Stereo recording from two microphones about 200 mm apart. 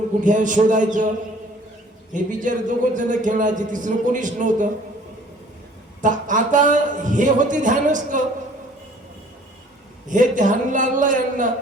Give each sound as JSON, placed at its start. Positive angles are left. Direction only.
{"t": 0.2, "sound": "speech", "side_deg": -40}
{"t": 2.1, "sound": "speech", "side_deg": -40}
{"t": 6.0, "sound": "speech", "side_deg": -40}
{"t": 10.1, "sound": "speech", "side_deg": -40}